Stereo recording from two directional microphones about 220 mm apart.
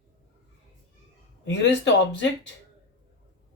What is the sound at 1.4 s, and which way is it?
Speech, 55° left (ahead or behind).